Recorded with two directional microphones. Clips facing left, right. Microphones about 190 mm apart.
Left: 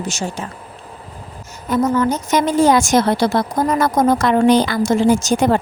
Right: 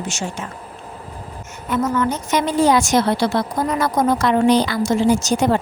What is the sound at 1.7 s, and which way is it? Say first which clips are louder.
A woman's voice: left 3 dB; 35° left (ahead or behind).